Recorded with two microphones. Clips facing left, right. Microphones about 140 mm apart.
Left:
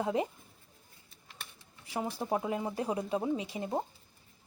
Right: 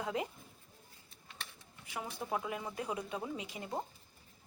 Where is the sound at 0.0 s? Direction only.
30° left (ahead or behind).